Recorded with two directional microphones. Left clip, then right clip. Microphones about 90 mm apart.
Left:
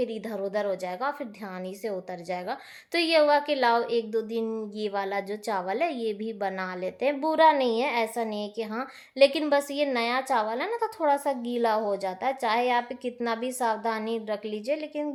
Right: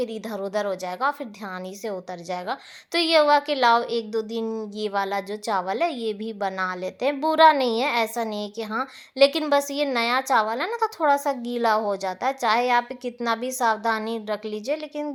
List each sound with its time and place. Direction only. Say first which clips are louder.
0.0 s a woman's voice: right 2 dB; 20° right (ahead or behind)